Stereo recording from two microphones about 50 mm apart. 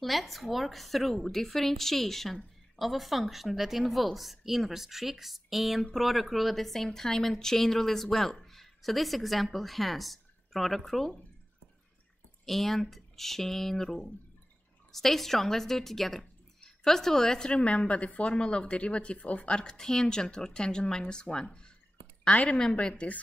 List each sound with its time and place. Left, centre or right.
0.0 s a woman's voice: centre
12.4 s a woman's voice: centre; by 19.6 s left
19.6 s a woman's voice: centre